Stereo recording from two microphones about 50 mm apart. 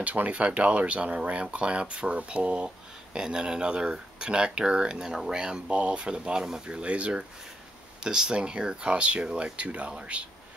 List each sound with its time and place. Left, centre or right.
0.0 s speech: right